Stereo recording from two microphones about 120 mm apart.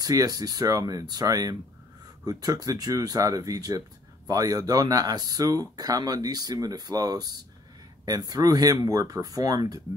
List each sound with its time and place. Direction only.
0.0 s speech: 30° right (ahead or behind)